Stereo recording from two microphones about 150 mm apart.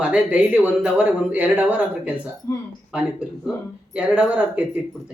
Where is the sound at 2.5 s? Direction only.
20° left (ahead or behind).